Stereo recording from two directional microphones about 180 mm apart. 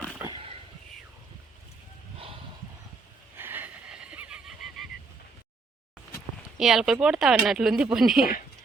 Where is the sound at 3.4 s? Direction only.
10° right (ahead or behind).